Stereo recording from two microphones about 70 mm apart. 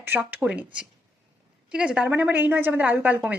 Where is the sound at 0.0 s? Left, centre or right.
Right.